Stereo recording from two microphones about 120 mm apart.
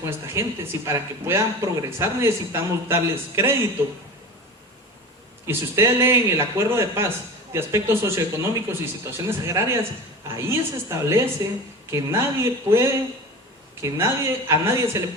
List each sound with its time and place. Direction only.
0.0 s speech: 25° right (ahead or behind)
5.5 s speech: 20° right (ahead or behind)